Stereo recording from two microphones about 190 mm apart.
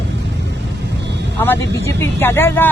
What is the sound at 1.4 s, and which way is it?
Speech, 10° left (ahead or behind).